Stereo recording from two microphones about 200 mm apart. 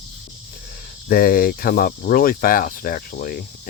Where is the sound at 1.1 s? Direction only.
45° left (ahead or behind).